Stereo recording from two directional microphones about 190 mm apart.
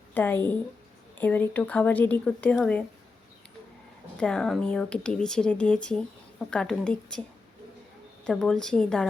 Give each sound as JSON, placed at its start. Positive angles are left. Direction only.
{"t": 0.1, "sound": "a woman's voice", "side_deg": 10}
{"t": 4.2, "sound": "speech", "side_deg": 5}
{"t": 8.3, "sound": "speech", "side_deg": 5}